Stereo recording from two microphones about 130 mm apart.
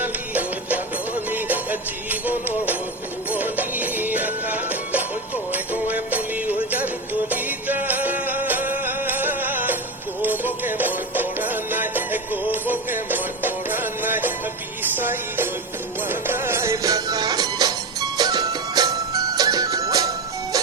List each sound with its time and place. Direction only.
0.0 s music: 15° right (ahead or behind); by 20.6 s 30° right (ahead or behind)